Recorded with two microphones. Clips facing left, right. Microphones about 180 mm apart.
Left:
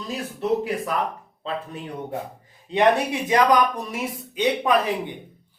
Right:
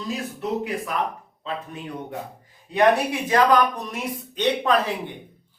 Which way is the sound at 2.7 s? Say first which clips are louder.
Even; 20° left (ahead or behind).